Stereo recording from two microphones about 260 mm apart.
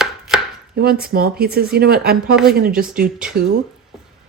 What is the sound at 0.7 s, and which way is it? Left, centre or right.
Speech, right.